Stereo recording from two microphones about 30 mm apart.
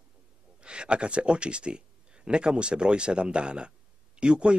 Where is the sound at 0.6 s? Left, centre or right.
Right.